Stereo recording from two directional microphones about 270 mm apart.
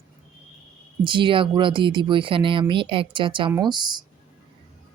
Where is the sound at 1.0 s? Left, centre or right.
Centre.